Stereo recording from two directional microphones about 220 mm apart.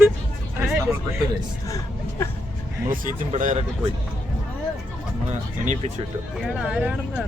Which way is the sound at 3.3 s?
30° right (ahead or behind).